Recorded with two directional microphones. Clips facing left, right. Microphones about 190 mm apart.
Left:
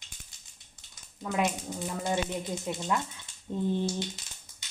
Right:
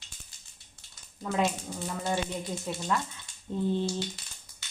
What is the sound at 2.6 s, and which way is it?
Speech, 20° left (ahead or behind).